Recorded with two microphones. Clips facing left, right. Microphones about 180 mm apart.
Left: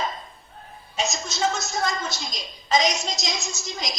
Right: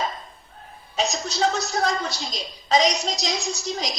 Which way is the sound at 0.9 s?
35° right (ahead or behind).